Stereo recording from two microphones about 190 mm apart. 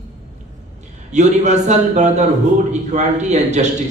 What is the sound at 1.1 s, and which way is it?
A man's voice, 35° right (ahead or behind).